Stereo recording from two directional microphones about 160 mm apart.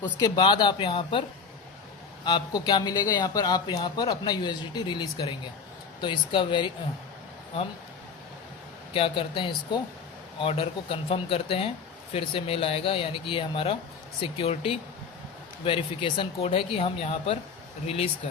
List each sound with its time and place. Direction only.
0.0 s speech: 25° left (ahead or behind)
2.2 s speech: 25° left (ahead or behind)
8.9 s speech: 35° left (ahead or behind)